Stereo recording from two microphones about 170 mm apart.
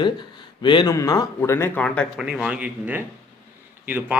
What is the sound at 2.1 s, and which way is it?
Speech, 5° right (ahead or behind).